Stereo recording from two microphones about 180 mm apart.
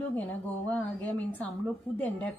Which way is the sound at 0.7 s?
10° left (ahead or behind).